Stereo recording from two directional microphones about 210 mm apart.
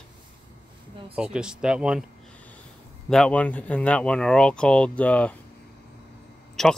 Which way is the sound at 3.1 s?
5° left (ahead or behind).